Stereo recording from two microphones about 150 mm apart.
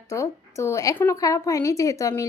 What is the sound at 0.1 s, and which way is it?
A woman's voice, 20° left (ahead or behind).